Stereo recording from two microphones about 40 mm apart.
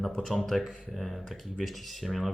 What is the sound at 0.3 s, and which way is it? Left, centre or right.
Speech, centre.